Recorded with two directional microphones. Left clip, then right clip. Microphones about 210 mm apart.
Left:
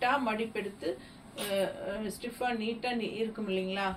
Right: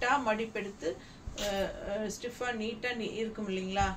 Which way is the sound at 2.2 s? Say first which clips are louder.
Left 2 dB; 15° right (ahead or behind).